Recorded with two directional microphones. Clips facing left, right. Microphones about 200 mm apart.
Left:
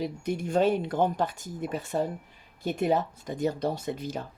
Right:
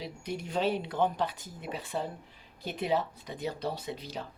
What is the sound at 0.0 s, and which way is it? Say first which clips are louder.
Speech: left 7 dB; 50° left (ahead or behind).